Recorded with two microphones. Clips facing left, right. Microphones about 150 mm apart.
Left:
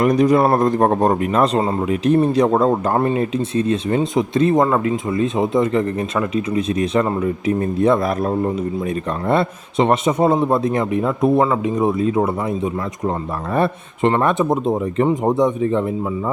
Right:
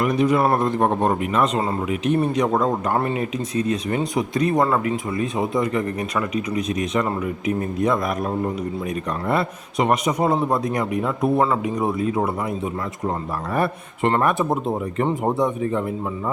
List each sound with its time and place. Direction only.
0.0 s a man's voice: 40° left (ahead or behind)
9.3 s speech: 30° left (ahead or behind)